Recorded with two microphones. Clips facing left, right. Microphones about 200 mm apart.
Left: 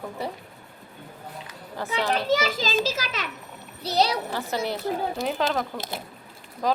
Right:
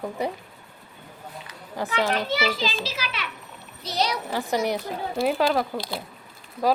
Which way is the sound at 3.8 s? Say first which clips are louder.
Left 3 dB; 35° left (ahead or behind).